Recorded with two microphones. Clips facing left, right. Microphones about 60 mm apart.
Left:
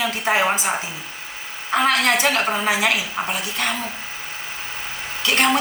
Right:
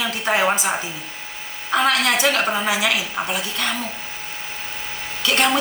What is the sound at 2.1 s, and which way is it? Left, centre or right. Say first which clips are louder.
Speech: even; left.